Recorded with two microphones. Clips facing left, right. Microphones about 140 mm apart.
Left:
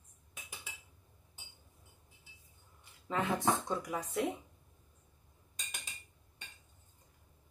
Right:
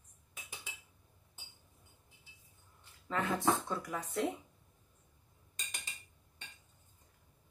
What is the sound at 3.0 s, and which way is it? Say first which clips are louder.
A woman's voice: even; 15° left (ahead or behind).